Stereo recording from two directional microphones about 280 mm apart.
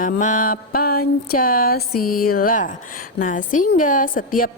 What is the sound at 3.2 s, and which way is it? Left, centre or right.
A woman's voice, left.